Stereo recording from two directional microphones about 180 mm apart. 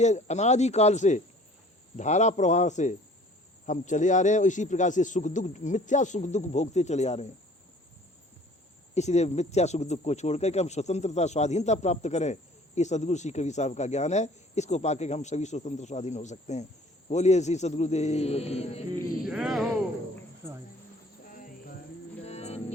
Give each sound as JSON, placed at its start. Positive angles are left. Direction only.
{"t": 0.0, "sound": "speech", "side_deg": 40}
{"t": 9.0, "sound": "speech", "side_deg": 40}
{"t": 19.2, "sound": "speech", "side_deg": 0}
{"t": 21.2, "sound": "cricket", "side_deg": 50}
{"t": 22.2, "sound": "music", "side_deg": 35}